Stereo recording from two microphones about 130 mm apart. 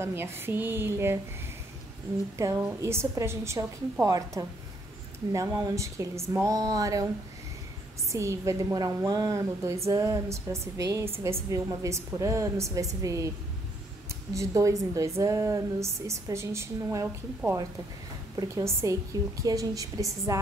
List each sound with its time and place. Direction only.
0.0 s a woman's voice: 20° right (ahead or behind)
2.3 s a woman's voice: 25° right (ahead or behind)
8.1 s a woman's voice: 25° right (ahead or behind)
14.3 s a woman's voice: 25° right (ahead or behind)
18.3 s a woman's voice: 25° right (ahead or behind)